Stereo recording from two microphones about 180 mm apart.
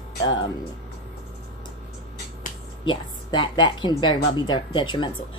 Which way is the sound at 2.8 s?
25° left (ahead or behind).